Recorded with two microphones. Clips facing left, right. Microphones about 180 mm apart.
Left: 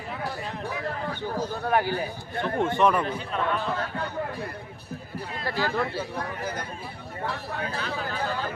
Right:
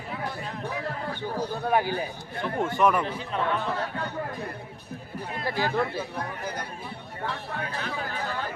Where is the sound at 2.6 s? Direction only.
25° left (ahead or behind).